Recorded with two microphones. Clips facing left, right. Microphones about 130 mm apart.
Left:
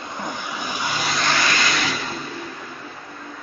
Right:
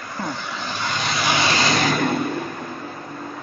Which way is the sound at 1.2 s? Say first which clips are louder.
Right 4 dB; 20° right (ahead or behind).